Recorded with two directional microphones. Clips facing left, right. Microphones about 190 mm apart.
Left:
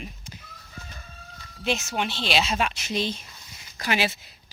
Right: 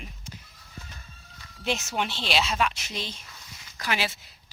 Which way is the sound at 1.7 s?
15° left (ahead or behind).